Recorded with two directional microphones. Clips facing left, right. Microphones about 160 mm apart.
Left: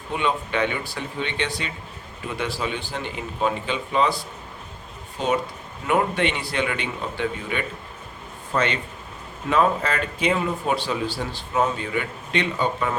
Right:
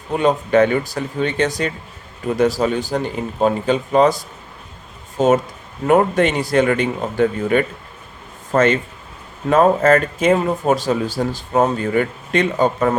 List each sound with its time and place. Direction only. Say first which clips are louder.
0.1 s speech: right 9 dB; 40° right (ahead or behind)